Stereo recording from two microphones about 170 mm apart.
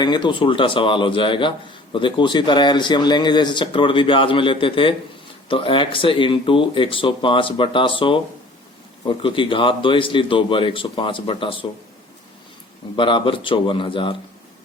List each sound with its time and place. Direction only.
0.0 s speech: 25° left (ahead or behind)
13.0 s speech: 30° left (ahead or behind)